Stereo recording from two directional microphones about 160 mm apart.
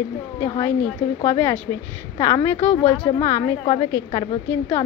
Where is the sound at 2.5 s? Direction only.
35° left (ahead or behind).